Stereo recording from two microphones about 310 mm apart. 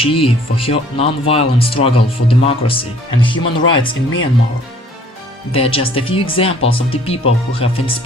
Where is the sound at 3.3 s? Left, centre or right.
Left.